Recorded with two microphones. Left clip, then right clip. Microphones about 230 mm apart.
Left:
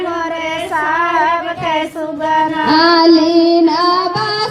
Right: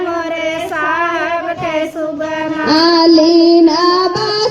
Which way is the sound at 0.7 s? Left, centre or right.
Centre.